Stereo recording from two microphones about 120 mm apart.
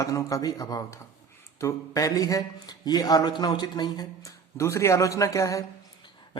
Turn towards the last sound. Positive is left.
turn(degrees=25)  # may be behind; listen again after turning